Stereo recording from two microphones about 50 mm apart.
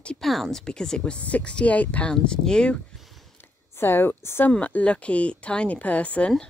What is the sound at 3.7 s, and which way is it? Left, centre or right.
Speech, left.